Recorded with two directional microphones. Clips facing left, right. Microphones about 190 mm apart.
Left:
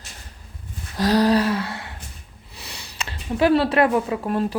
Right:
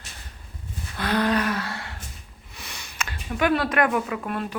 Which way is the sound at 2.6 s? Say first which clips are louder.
Even; 30° left (ahead or behind).